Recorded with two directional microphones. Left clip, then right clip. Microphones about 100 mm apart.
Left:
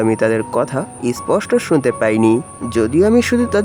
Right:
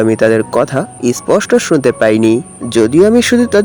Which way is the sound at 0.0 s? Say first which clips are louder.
Right 5 dB; 30° right (ahead or behind).